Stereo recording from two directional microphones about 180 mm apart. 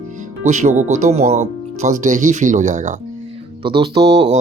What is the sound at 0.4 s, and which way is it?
Speech, 40° right (ahead or behind).